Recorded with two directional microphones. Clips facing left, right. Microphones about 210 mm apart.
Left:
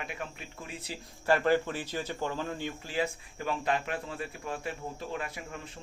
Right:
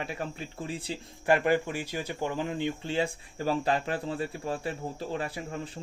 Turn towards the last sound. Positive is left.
turn(degrees=-35)  # may be behind; listen again after turning